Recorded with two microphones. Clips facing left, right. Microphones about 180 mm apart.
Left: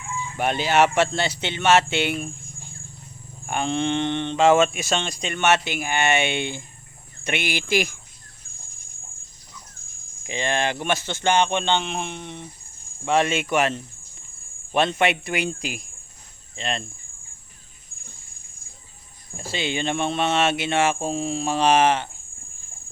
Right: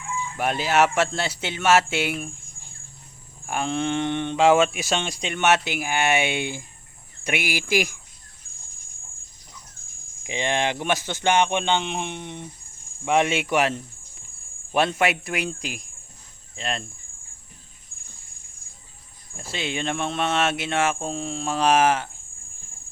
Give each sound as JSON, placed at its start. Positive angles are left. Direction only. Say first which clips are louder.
{"t": 0.3, "sound": "speech", "louder": "left 1 dB", "side_deg": 0}
{"t": 3.4, "sound": "speech", "louder": "left 1 dB", "side_deg": 0}
{"t": 10.2, "sound": "speech", "louder": "even", "side_deg": -15}
{"t": 19.4, "sound": "speech", "louder": "left 2 dB", "side_deg": 0}